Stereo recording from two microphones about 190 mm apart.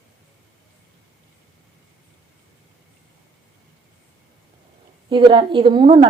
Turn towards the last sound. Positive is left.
turn(degrees=-25)  # may be behind; listen again after turning